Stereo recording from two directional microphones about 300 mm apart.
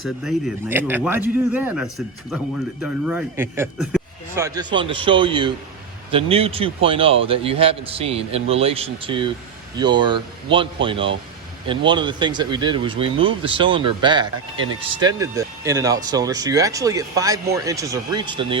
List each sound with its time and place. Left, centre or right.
0.0 s a man's voice: centre